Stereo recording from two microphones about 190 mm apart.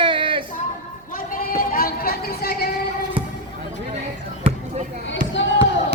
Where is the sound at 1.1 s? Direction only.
50° left (ahead or behind).